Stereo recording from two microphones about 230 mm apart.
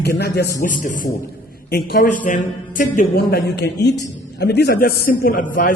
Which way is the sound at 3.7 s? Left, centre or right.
Centre.